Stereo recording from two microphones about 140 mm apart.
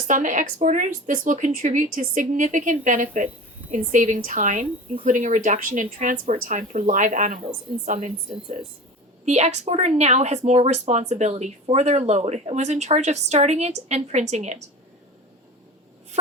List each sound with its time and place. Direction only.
0.1 s a woman's voice: 65° right (ahead or behind)